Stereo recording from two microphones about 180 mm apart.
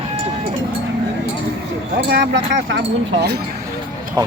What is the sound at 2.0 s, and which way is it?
Speech, 70° right (ahead or behind).